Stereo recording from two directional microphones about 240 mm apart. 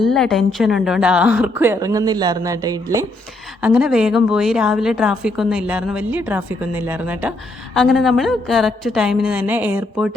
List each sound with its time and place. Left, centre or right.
0.0 s a woman's voice: centre